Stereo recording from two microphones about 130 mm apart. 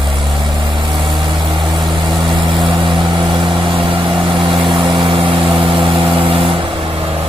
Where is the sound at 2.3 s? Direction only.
35° right (ahead or behind).